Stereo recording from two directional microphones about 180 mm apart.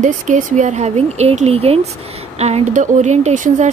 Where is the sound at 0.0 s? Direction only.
45° right (ahead or behind).